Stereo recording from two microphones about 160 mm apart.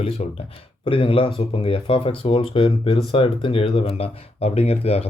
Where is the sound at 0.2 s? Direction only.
45° left (ahead or behind).